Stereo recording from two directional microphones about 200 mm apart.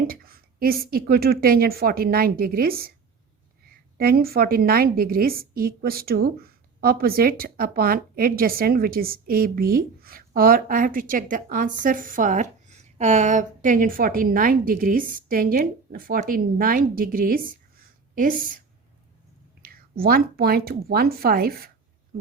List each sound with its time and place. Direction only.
0.1 s a woman's voice: 50° right (ahead or behind)
3.9 s a woman's voice: 50° right (ahead or behind)
19.6 s a woman's voice: 50° right (ahead or behind)